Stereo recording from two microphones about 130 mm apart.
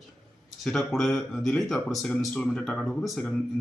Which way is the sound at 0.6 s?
Centre (ahead or behind).